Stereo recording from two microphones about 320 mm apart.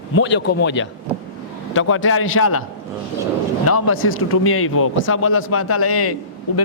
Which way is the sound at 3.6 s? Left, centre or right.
Left.